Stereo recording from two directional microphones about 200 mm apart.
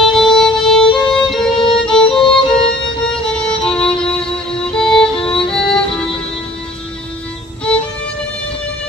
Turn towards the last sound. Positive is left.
turn(degrees=5)  # may be behind; listen again after turning